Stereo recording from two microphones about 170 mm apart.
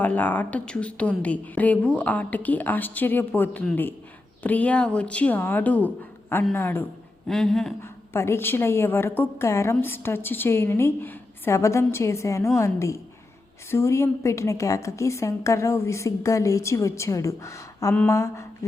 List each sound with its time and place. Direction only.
0.0 s a woman's voice: 10° left (ahead or behind)
7.3 s speech: centre (ahead or behind)
7.8 s a woman's voice: 15° left (ahead or behind)